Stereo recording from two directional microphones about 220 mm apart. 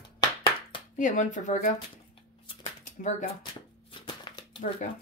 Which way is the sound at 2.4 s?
30° left (ahead or behind).